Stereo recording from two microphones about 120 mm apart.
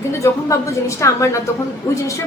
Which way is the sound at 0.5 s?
25° left (ahead or behind).